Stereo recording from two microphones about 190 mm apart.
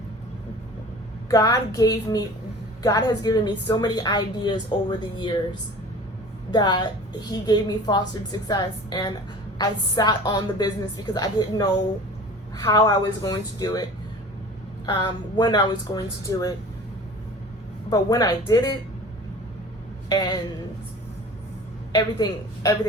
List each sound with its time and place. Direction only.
1.3 s a woman's voice: 20° left (ahead or behind)
6.5 s a woman's voice: 25° left (ahead or behind)
12.6 s a woman's voice: 20° left (ahead or behind)
14.8 s a woman's voice: 20° left (ahead or behind)
17.9 s a woman's voice: 20° left (ahead or behind)
20.1 s a woman's voice: 20° left (ahead or behind)
21.9 s a woman's voice: 20° left (ahead or behind)